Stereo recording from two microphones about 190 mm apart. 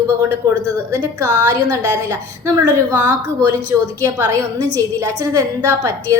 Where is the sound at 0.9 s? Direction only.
15° right (ahead or behind).